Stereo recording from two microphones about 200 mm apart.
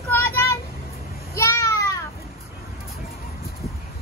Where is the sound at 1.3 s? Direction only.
15° left (ahead or behind).